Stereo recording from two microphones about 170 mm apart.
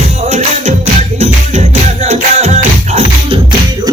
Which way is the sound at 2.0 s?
40° right (ahead or behind).